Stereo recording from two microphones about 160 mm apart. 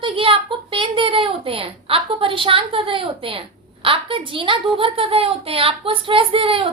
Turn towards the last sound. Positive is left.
turn(degrees=-35)  # may be behind; listen again after turning